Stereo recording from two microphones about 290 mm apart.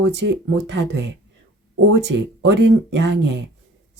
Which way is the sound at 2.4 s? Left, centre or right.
Right.